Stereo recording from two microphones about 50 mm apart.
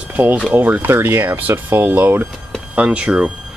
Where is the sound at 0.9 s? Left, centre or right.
Right.